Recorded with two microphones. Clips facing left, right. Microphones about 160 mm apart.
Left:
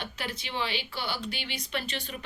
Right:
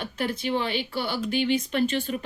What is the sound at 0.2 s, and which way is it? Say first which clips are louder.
Speech: right 9 dB; 55° right (ahead or behind).